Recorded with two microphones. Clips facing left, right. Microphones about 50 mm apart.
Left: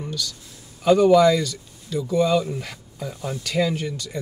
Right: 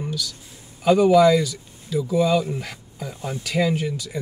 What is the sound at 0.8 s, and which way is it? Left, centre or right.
Speech, centre.